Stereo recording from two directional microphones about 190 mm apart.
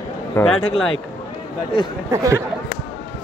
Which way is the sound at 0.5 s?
90° left.